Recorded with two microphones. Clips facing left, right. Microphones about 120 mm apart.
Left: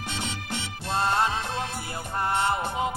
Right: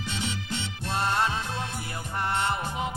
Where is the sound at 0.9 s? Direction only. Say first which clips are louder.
Left 2 dB; 25° left (ahead or behind).